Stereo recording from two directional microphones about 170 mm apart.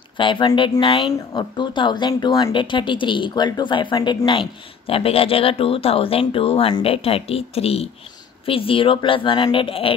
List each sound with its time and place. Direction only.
0.2 s speech: 30° left (ahead or behind)